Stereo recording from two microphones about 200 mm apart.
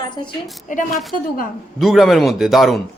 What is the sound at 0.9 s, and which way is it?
Speech, centre (ahead or behind).